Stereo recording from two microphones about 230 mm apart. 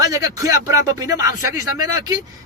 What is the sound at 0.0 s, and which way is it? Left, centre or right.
A man's voice, centre.